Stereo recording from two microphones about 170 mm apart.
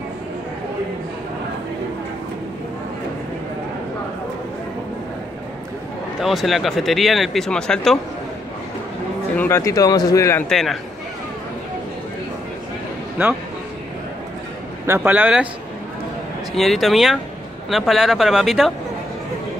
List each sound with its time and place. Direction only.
6.2 s speech: centre (ahead or behind)
9.4 s speech: 15° left (ahead or behind)
10.5 s speech: centre (ahead or behind)
13.2 s speech: 15° right (ahead or behind)
14.9 s speech: 10° right (ahead or behind)
16.5 s speech: centre (ahead or behind)